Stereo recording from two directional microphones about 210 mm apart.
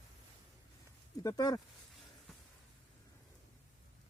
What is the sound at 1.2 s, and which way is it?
Speech, 20° left (ahead or behind).